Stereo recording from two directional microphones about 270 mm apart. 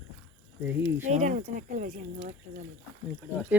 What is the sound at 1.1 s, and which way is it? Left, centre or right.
Speech, right.